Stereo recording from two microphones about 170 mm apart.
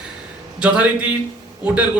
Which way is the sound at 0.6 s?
5° right (ahead or behind).